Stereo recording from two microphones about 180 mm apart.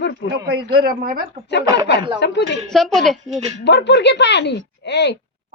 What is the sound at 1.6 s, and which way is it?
Speech, 20° right (ahead or behind).